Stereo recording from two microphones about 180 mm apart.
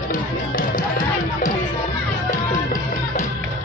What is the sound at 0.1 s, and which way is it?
Music, 50° left (ahead or behind).